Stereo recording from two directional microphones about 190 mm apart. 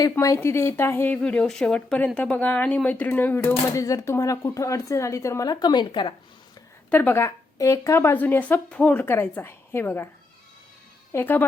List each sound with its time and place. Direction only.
0.0 s speech: 15° left (ahead or behind)
6.9 s speech: 10° left (ahead or behind)
11.1 s speech: 10° left (ahead or behind)